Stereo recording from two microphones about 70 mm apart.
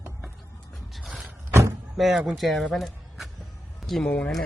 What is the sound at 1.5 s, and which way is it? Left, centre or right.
Vehicle, right.